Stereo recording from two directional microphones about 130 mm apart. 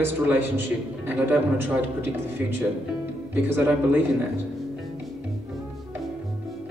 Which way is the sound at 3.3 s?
15° right (ahead or behind).